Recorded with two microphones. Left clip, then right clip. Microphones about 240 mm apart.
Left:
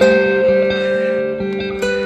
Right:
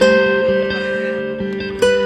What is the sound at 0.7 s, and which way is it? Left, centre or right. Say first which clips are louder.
Music: left 4 dB; centre.